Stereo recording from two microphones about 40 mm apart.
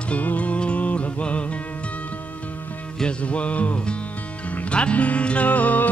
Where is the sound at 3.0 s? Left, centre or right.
Left.